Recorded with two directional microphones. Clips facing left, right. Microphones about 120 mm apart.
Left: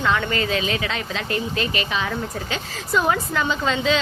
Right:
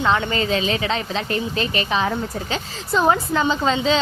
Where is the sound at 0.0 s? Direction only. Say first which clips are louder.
Right 2 dB; 25° right (ahead or behind).